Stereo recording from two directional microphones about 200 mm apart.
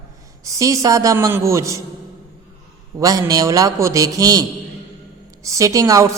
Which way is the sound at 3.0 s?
15° right (ahead or behind).